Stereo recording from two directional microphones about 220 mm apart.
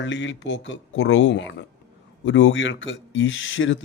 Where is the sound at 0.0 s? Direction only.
55° left (ahead or behind).